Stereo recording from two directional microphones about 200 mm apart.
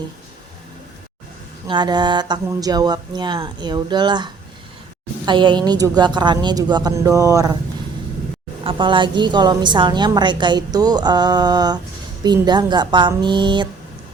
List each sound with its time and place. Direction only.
1.6 s a woman's voice: 20° right (ahead or behind)
8.6 s a woman's voice: 25° right (ahead or behind)